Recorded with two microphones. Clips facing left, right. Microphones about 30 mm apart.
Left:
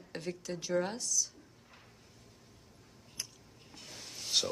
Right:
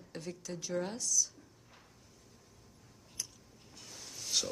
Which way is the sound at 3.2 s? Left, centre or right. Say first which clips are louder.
Even; left.